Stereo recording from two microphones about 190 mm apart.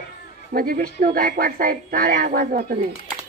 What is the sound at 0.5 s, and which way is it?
Speech, 50° right (ahead or behind).